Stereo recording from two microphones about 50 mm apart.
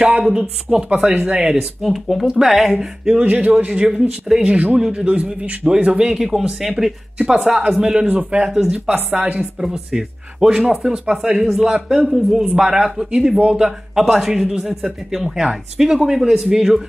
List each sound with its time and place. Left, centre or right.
0.2 s speech: centre
1.8 s speech: centre
3.1 s a man's voice: right
9.6 s speech: centre
11.9 s speech: centre
12.6 s speech: centre